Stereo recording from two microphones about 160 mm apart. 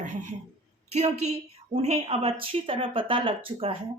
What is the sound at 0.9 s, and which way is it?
Speech, 45° right (ahead or behind).